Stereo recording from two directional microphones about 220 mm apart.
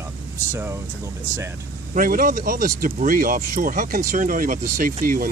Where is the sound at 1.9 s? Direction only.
40° right (ahead or behind).